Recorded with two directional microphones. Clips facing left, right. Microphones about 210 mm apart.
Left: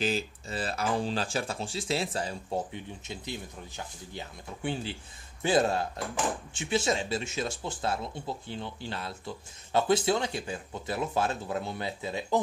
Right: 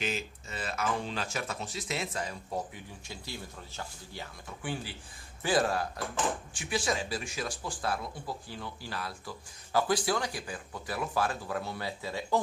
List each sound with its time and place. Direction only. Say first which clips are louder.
0.0 s speech: left 5 dB; 35° left (ahead or behind)